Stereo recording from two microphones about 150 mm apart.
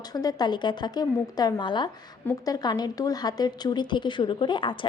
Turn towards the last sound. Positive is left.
turn(degrees=35)  # may be behind; listen again after turning